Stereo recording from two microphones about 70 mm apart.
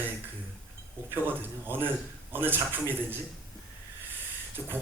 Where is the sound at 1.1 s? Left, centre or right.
Right.